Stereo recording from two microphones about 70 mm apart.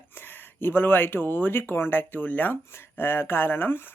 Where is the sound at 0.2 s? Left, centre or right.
Left.